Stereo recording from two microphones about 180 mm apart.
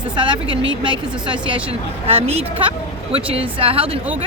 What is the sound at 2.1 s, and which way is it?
A woman's voice, 35° right (ahead or behind).